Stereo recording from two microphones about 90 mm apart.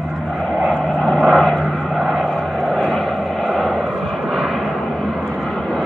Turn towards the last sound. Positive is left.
turn(degrees=5)  # may be behind; listen again after turning